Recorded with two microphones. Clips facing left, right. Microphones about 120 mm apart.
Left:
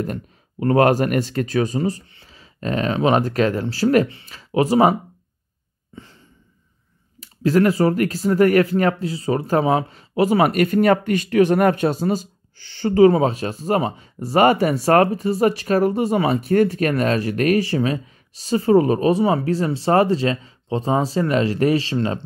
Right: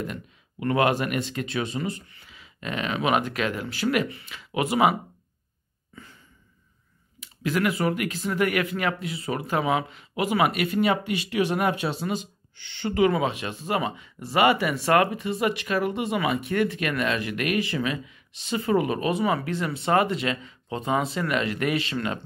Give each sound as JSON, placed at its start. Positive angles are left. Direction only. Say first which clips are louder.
{"t": 0.0, "sound": "speech", "louder": "left 7 dB", "side_deg": 40}
{"t": 5.9, "sound": "a sound", "louder": "left 6 dB", "side_deg": 30}
{"t": 7.2, "sound": "speech", "louder": "left 9 dB", "side_deg": 35}